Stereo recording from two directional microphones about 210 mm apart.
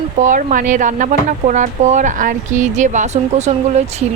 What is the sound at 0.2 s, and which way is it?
Speech, 40° right (ahead or behind).